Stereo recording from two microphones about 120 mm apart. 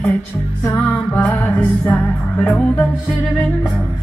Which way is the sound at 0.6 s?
15° left (ahead or behind).